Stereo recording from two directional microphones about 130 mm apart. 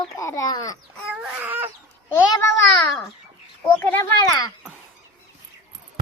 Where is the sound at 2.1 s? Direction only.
20° left (ahead or behind).